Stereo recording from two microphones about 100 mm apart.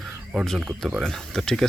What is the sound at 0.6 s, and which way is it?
Speech, 10° right (ahead or behind).